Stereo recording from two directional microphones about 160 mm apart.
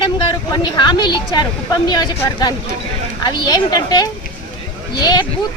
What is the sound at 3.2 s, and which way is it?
Speech, 25° left (ahead or behind).